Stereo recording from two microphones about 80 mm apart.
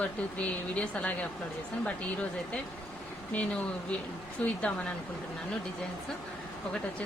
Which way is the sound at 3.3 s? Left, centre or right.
Centre.